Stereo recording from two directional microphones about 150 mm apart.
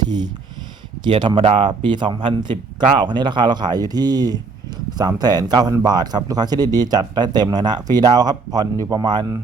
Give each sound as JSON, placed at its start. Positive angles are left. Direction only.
{"t": 1.0, "sound": "speech", "side_deg": -30}